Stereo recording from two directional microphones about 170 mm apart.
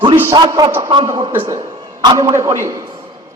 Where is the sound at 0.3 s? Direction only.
25° right (ahead or behind).